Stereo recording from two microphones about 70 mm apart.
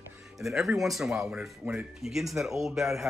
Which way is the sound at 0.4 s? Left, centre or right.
Centre.